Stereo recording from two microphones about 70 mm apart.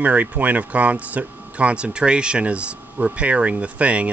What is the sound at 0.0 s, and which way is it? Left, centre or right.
Speech, right.